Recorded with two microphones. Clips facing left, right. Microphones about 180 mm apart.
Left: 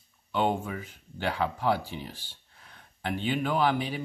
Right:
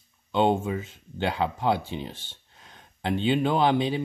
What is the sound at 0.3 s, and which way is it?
Speech, 25° right (ahead or behind).